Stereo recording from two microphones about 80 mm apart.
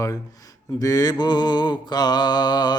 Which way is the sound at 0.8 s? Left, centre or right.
Left.